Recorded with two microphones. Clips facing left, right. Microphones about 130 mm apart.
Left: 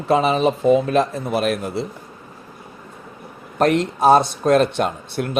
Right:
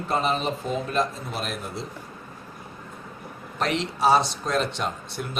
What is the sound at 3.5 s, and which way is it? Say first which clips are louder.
Speech: left 9 dB; 50° left (ahead or behind).